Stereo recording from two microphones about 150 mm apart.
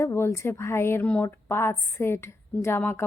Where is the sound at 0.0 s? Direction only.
20° left (ahead or behind).